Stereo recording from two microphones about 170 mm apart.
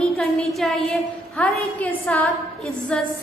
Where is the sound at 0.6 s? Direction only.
5° left (ahead or behind).